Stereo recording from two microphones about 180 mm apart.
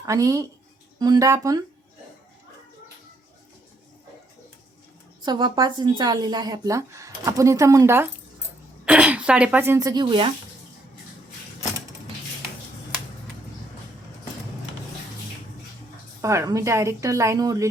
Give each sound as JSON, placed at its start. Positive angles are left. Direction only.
{"t": 0.0, "sound": "speech", "side_deg": -20}
{"t": 5.2, "sound": "speech", "side_deg": -25}
{"t": 16.2, "sound": "speech", "side_deg": -15}